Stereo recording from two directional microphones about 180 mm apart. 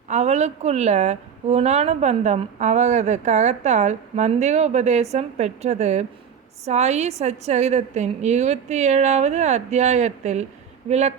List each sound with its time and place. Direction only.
0.1 s a woman's voice: 40° right (ahead or behind)